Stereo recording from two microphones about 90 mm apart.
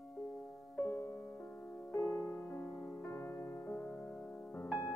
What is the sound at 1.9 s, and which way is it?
Music, 25° left (ahead or behind).